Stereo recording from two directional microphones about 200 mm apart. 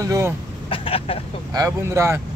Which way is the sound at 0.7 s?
25° left (ahead or behind).